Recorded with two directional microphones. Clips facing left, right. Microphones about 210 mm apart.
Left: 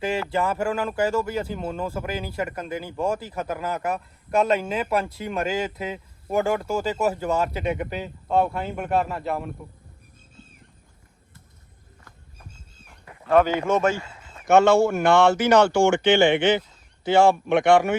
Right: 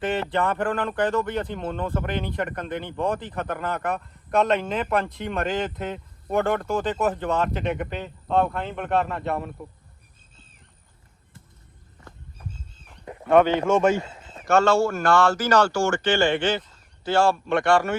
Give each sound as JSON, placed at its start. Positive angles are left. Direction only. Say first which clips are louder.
{"t": 0.0, "sound": "speech", "louder": "even", "side_deg": 0}
{"t": 13.3, "sound": "speech", "louder": "right 1 dB", "side_deg": 5}
{"t": 14.4, "sound": "speech", "louder": "left 3 dB", "side_deg": 20}